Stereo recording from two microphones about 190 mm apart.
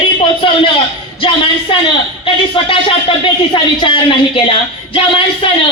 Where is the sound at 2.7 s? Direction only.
30° left (ahead or behind).